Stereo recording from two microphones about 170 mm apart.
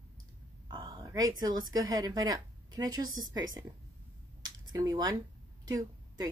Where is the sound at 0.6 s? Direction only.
25° right (ahead or behind).